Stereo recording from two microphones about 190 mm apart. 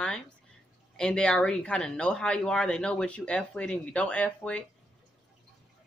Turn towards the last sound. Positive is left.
turn(degrees=5)  # may be behind; listen again after turning